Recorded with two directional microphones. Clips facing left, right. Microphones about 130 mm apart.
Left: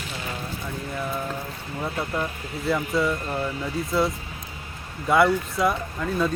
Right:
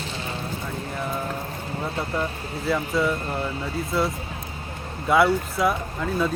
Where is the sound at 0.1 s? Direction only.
30° right (ahead or behind).